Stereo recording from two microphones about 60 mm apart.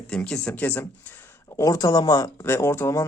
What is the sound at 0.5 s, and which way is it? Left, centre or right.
Speech, left.